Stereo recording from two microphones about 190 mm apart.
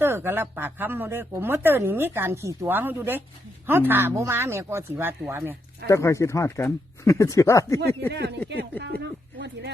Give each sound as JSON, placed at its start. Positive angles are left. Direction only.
{"t": 0.0, "sound": "speech", "side_deg": -10}
{"t": 5.9, "sound": "speech", "side_deg": 15}
{"t": 8.1, "sound": "speech", "side_deg": -60}
{"t": 9.4, "sound": "speech", "side_deg": -65}